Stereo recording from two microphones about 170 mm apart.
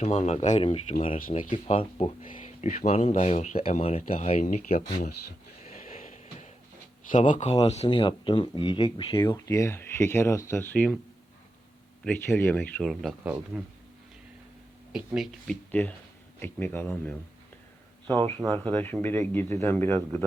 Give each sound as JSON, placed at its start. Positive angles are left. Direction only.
{"t": 0.0, "sound": "speech", "side_deg": 40}
{"t": 5.6, "sound": "a sound", "side_deg": 45}
{"t": 7.1, "sound": "speech", "side_deg": 50}
{"t": 9.1, "sound": "speech", "side_deg": 20}
{"t": 12.0, "sound": "speech", "side_deg": 10}
{"t": 14.9, "sound": "speech", "side_deg": 0}
{"t": 15.7, "sound": "speech", "side_deg": 10}
{"t": 18.1, "sound": "speech", "side_deg": -25}
{"t": 18.6, "sound": "speech", "side_deg": 10}